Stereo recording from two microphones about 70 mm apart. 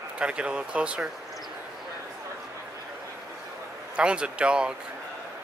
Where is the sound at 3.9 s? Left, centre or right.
Centre.